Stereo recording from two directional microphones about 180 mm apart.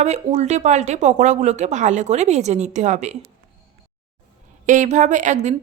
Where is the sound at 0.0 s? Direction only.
40° right (ahead or behind).